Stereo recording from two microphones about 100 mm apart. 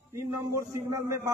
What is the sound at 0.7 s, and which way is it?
Speech, 30° right (ahead or behind).